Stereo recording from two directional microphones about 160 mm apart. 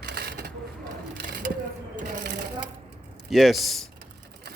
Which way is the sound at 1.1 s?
75° right (ahead or behind).